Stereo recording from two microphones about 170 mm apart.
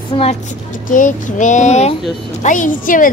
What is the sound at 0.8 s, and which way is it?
A woman's voice, 50° left (ahead or behind).